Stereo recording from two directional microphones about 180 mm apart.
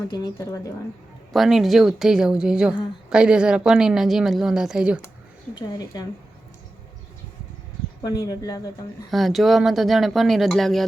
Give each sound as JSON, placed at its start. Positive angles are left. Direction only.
{"t": 0.1, "sound": "speech", "side_deg": 20}
{"t": 1.3, "sound": "a woman's voice", "side_deg": 0}
{"t": 5.5, "sound": "speech", "side_deg": 20}
{"t": 8.0, "sound": "speech", "side_deg": 20}
{"t": 9.0, "sound": "a woman's voice", "side_deg": 0}